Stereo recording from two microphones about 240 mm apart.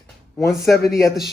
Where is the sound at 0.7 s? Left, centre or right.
Left.